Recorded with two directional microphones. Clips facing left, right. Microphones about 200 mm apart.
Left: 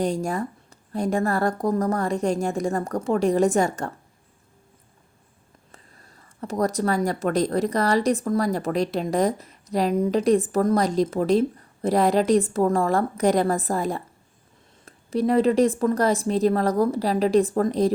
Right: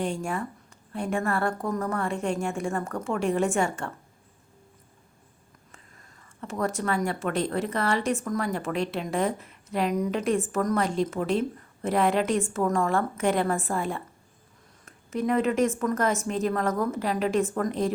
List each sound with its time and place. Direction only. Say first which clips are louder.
0.0 s speech: left 5 dB; 40° left (ahead or behind)
5.7 s speech: left 4 dB; 40° left (ahead or behind)